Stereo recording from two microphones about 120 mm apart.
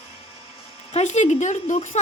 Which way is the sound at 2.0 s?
75° left (ahead or behind).